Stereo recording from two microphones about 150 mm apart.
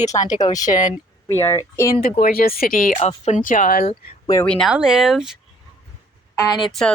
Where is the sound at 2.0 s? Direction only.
75° left (ahead or behind).